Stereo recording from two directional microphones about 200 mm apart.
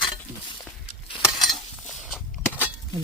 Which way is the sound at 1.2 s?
Centre (ahead or behind).